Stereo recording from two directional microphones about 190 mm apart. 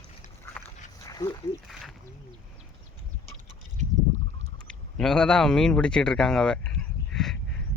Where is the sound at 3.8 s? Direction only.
40° right (ahead or behind).